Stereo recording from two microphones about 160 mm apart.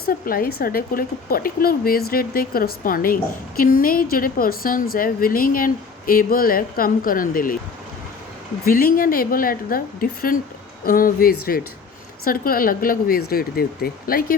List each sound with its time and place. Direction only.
0.0 s speech: 65° left (ahead or behind)
8.6 s speech: 65° left (ahead or behind)